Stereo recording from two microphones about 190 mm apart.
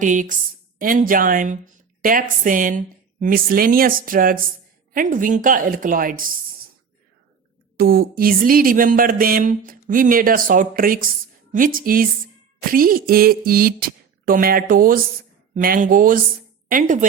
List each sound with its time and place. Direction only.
0.0 s a woman's voice: 40° right (ahead or behind)
7.8 s speech: 50° right (ahead or behind)